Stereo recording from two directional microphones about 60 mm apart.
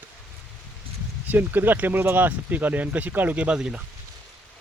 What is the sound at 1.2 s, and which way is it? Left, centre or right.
Speech, right.